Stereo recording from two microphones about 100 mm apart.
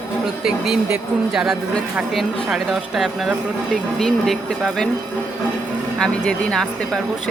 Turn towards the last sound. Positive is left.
turn(degrees=5)  # may be behind; listen again after turning